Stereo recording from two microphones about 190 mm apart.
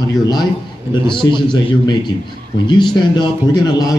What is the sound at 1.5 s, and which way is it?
A man's voice, 25° left (ahead or behind).